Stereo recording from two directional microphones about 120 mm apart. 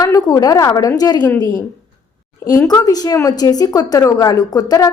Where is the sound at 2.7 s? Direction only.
30° left (ahead or behind).